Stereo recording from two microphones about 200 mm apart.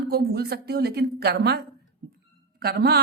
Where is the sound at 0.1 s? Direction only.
50° right (ahead or behind).